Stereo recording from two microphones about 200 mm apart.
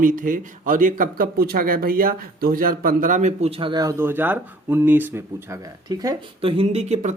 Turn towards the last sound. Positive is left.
turn(degrees=-35)  # may be behind; listen again after turning